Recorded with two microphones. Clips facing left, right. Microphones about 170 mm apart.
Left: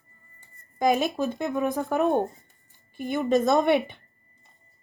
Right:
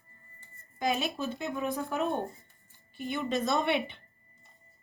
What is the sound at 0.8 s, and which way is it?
A woman's voice, 40° left (ahead or behind).